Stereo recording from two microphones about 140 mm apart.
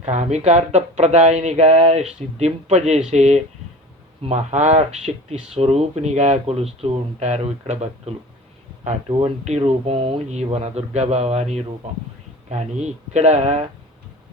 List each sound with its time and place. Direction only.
0.0 s speech: 55° right (ahead or behind)